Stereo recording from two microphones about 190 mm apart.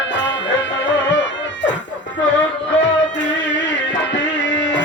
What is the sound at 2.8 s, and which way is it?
Music, 75° left (ahead or behind).